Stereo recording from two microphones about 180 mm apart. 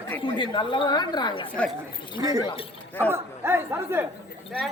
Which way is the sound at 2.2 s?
20° right (ahead or behind).